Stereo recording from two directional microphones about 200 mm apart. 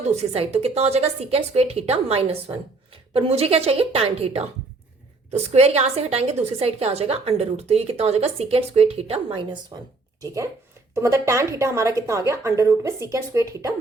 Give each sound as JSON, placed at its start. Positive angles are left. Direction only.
{"t": 0.1, "sound": "a woman's voice", "side_deg": -35}